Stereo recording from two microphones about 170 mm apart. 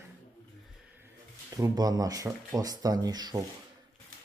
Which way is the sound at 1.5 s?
20° right (ahead or behind).